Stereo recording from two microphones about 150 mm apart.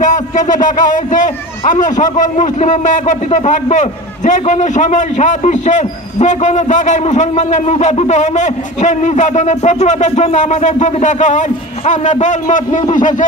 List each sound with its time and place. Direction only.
0.0 s a man's voice: 55° left (ahead or behind)